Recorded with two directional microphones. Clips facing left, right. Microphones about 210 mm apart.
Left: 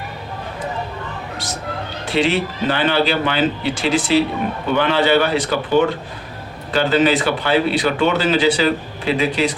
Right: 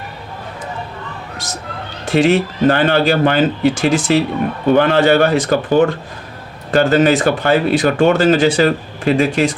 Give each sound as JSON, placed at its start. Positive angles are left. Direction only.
{"t": 2.0, "sound": "speech", "side_deg": -45}